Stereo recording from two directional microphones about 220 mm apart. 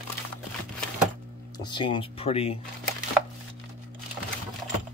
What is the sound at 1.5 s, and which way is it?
Speech, 20° left (ahead or behind).